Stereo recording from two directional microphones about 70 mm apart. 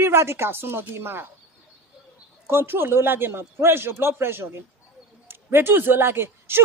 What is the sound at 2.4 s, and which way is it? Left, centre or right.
Speech, right.